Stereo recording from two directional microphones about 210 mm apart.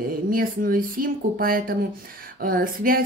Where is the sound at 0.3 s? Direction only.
40° right (ahead or behind).